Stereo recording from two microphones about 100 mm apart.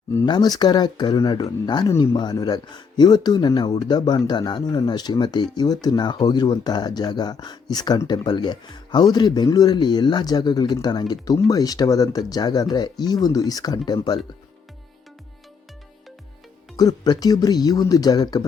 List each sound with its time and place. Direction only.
0.3 s speech: 45° left (ahead or behind)
16.7 s speech: 40° left (ahead or behind)